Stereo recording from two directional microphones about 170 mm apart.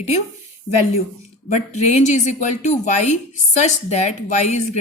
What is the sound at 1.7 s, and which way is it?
A woman's voice, 45° left (ahead or behind).